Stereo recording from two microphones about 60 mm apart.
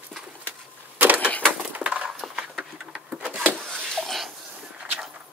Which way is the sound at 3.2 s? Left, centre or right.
Right.